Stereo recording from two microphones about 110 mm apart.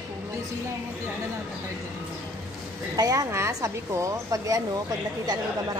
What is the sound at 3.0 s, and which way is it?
A woman's voice, 35° right (ahead or behind).